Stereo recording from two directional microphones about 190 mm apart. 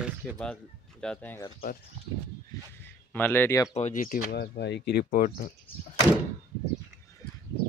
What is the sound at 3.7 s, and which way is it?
Speech, 40° left (ahead or behind).